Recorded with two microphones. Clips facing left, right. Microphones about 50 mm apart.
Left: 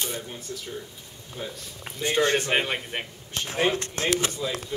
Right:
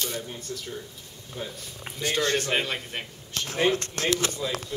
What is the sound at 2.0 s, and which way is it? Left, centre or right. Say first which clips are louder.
A man's voice: left 3 dB; centre.